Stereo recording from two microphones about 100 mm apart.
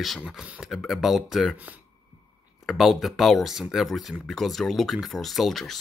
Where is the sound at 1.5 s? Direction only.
15° right (ahead or behind).